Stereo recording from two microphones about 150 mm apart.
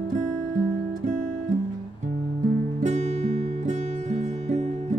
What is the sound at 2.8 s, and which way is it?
Music, 50° right (ahead or behind).